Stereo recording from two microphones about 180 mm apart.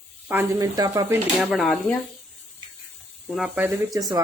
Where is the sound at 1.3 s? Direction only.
Centre (ahead or behind).